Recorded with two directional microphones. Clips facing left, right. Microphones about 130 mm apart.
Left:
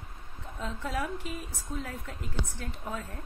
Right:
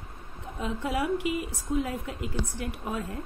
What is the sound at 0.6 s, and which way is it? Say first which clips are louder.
A woman's voice: right 4 dB; 15° right (ahead or behind).